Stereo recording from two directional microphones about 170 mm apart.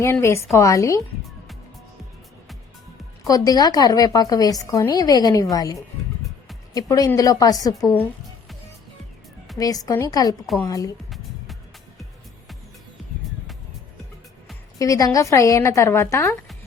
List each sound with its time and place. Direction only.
0.0 s a woman's voice: 15° left (ahead or behind)
3.2 s a woman's voice: 20° left (ahead or behind)
6.7 s a woman's voice: 20° left (ahead or behind)
9.6 s a woman's voice: 20° left (ahead or behind)
14.8 s a woman's voice: 20° left (ahead or behind)